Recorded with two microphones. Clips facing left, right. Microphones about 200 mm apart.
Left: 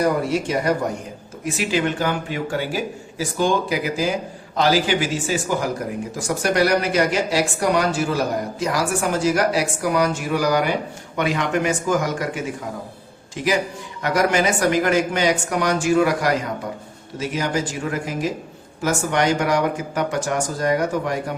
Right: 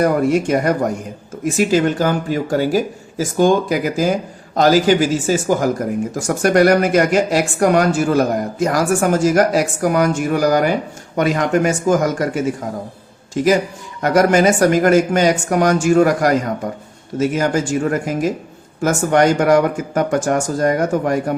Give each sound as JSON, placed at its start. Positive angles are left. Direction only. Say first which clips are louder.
{"t": 0.0, "sound": "speech", "louder": "right 5 dB", "side_deg": -50}